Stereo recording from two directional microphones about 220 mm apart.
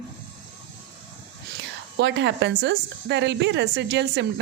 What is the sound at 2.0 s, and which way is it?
A woman's voice, 55° right (ahead or behind).